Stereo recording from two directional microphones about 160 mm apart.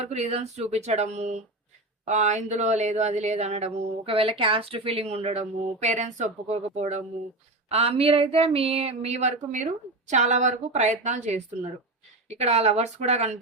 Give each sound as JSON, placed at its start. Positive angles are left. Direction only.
{"t": 0.0, "sound": "speech", "side_deg": -40}